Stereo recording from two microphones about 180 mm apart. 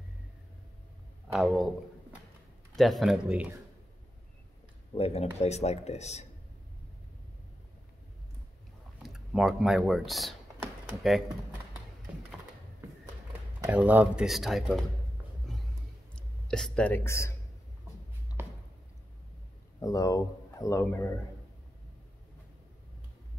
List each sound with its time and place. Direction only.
1.3 s speech: centre (ahead or behind)
2.7 s speech: centre (ahead or behind)
4.9 s speech: 35° left (ahead or behind)
9.0 s speech: centre (ahead or behind)
13.7 s speech: 10° right (ahead or behind)
15.4 s a sound: centre (ahead or behind)
16.2 s speech: 5° left (ahead or behind)
18.4 s a sound: 10° right (ahead or behind)
19.8 s speech: 20° left (ahead or behind)